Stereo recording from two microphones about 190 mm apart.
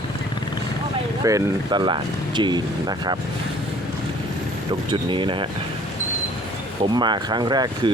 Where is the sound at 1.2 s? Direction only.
20° right (ahead or behind).